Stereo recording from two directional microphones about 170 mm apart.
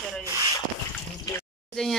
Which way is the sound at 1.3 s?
20° left (ahead or behind).